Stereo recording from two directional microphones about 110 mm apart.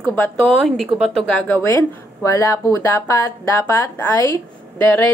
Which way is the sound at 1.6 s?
30° left (ahead or behind).